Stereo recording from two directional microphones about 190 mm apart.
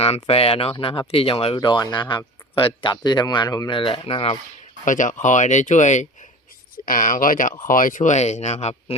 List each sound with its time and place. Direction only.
0.0 s speech: 30° left (ahead or behind)
4.9 s speech: 45° left (ahead or behind)